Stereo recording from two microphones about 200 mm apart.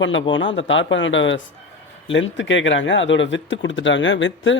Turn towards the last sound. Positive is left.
turn(degrees=70)  # may be behind; listen again after turning